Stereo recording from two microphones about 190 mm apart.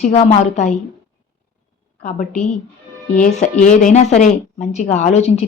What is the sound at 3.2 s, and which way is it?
A woman's voice, 40° left (ahead or behind).